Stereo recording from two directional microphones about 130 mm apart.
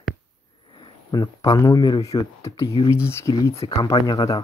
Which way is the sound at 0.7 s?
30° left (ahead or behind).